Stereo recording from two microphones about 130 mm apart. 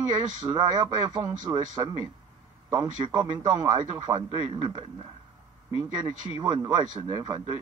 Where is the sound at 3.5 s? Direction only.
30° right (ahead or behind).